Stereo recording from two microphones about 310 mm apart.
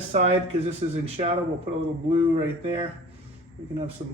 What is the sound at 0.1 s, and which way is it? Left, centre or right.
A man's voice, right.